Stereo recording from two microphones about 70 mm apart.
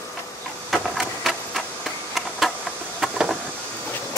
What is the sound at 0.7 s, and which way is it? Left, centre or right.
Printer, centre.